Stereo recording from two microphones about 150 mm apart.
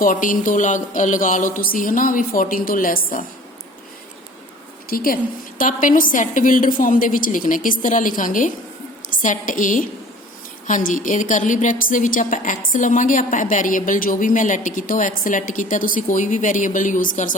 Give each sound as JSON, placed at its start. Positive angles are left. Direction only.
{"t": 0.0, "sound": "a woman's voice", "side_deg": 65}
{"t": 4.9, "sound": "a woman's voice", "side_deg": 75}
{"t": 5.5, "sound": "a woman's voice", "side_deg": 60}